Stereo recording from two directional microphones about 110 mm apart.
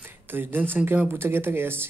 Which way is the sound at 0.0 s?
20° right (ahead or behind).